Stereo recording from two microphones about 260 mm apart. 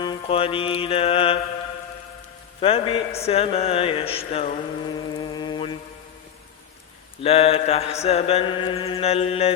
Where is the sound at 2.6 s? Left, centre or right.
Left.